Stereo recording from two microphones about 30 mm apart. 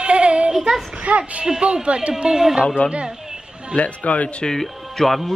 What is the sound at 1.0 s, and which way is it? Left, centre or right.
Speech, right.